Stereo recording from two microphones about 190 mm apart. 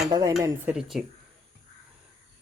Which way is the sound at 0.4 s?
10° right (ahead or behind).